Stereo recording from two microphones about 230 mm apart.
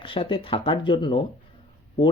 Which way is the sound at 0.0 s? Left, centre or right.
Left.